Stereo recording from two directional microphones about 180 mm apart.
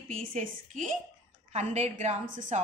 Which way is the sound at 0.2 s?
45° right (ahead or behind).